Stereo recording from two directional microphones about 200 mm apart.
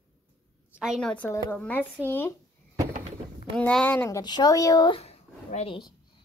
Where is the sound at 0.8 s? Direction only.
Centre (ahead or behind).